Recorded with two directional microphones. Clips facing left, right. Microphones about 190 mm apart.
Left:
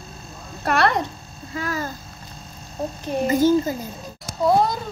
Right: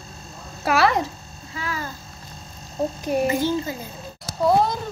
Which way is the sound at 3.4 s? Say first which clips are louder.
Left 6 dB; 40° left (ahead or behind).